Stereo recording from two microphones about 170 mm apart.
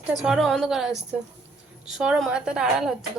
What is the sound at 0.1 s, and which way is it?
A woman's voice, centre (ahead or behind).